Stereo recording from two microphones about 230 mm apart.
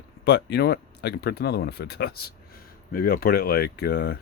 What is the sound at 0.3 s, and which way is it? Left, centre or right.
Speech, left.